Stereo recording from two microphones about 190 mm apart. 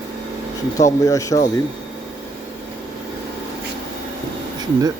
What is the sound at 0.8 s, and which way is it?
Speech, 15° left (ahead or behind).